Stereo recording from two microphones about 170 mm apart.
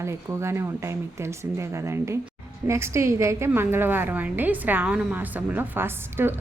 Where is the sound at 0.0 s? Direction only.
15° right (ahead or behind).